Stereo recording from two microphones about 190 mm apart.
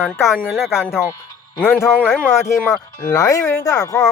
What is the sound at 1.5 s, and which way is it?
Speech, 10° left (ahead or behind).